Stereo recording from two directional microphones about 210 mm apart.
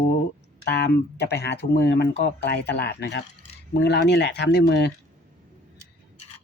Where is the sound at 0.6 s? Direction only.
50° left (ahead or behind).